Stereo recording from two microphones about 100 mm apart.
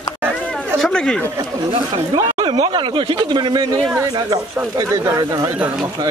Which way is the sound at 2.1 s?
45° right (ahead or behind).